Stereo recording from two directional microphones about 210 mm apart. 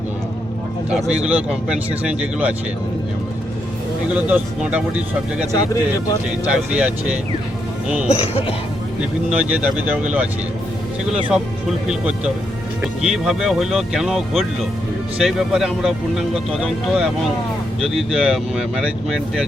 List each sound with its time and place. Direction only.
1.1 s speech: 5° right (ahead or behind)
4.1 s speech: 5° right (ahead or behind)
5.5 s speech: 15° left (ahead or behind)
6.5 s speech: 5° right (ahead or behind)
8.3 s speech: 30° left (ahead or behind)
9.3 s speech: 5° right (ahead or behind)
11.9 s speech: 5° right (ahead or behind)